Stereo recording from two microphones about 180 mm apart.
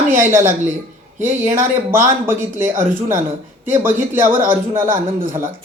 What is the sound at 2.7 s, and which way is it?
Speech, 45° right (ahead or behind).